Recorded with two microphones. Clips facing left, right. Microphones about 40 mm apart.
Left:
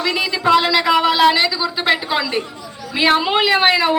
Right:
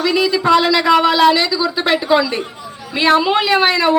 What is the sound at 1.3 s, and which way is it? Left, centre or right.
A woman's voice, centre.